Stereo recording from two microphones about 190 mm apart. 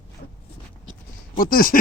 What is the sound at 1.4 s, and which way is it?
Speech, 45° left (ahead or behind).